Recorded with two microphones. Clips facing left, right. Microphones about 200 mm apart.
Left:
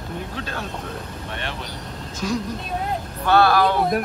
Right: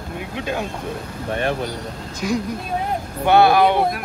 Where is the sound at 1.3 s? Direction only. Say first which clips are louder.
Right 11 dB; 45° right (ahead or behind).